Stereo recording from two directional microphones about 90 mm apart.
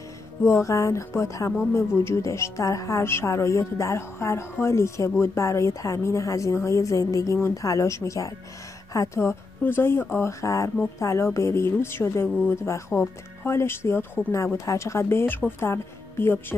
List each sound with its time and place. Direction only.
0.4 s a woman's voice: 30° left (ahead or behind)